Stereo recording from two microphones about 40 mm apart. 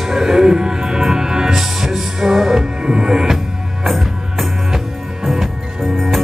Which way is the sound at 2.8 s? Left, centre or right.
Centre.